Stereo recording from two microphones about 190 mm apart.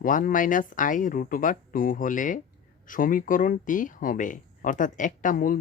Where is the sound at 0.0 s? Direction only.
45° left (ahead or behind).